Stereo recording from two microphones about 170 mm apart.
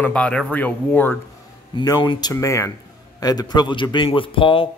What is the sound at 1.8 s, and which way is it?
Speech, 25° left (ahead or behind).